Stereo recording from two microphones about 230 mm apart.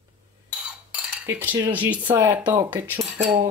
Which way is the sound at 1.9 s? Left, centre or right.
Right.